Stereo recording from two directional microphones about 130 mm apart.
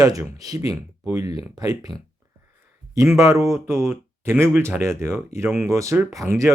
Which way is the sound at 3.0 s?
25° right (ahead or behind).